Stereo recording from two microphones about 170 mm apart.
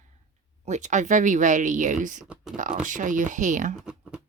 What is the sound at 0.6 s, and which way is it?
Speech, 45° right (ahead or behind).